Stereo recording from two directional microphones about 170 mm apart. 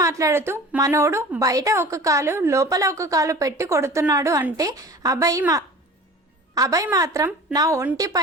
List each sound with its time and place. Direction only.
0.0 s a woman's voice: 20° right (ahead or behind)